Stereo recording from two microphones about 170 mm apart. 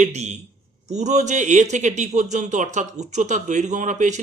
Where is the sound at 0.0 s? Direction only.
45° right (ahead or behind).